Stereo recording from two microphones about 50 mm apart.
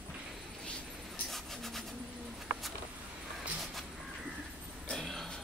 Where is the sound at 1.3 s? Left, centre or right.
Centre.